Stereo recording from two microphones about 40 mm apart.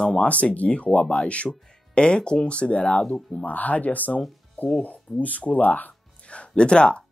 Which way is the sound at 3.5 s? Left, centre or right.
Left.